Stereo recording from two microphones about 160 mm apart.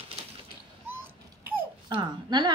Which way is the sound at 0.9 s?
15° right (ahead or behind).